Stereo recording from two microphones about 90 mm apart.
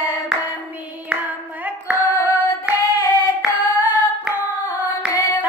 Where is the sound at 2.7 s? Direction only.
20° right (ahead or behind).